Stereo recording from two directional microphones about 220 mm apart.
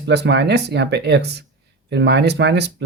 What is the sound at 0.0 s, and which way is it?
Speech, 50° right (ahead or behind).